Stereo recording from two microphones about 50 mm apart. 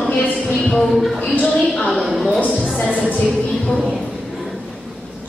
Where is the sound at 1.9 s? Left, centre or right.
Centre.